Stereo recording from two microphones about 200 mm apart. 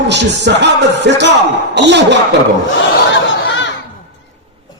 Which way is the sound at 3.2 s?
65° left (ahead or behind).